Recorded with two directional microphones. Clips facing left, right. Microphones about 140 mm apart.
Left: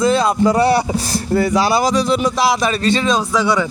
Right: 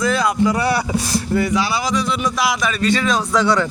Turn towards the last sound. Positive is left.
turn(degrees=5)  # may be behind; listen again after turning